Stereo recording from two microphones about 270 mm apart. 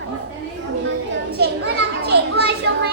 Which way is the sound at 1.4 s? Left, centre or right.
Right.